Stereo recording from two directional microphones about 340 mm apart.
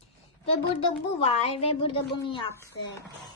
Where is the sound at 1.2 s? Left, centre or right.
Centre.